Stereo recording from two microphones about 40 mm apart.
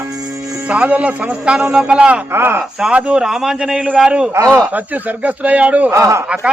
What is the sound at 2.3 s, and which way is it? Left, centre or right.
Speech, right.